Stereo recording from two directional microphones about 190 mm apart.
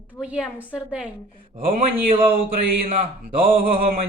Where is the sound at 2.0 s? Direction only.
30° right (ahead or behind).